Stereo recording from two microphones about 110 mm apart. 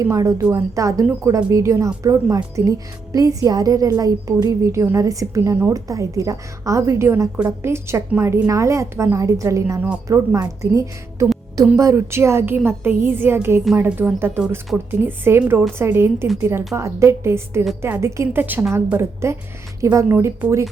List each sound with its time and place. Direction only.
0.0 s speech: 30° right (ahead or behind)